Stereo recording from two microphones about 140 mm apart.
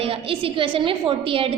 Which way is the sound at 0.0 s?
45° right (ahead or behind).